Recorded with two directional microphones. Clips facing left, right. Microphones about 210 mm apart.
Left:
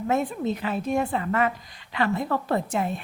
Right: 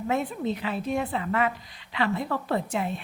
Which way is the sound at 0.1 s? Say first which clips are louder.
Left 2 dB; 45° left (ahead or behind).